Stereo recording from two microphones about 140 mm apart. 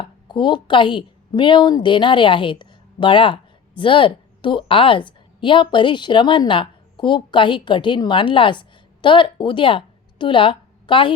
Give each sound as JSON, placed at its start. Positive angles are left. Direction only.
{"t": 0.0, "sound": "a woman's voice", "side_deg": 35}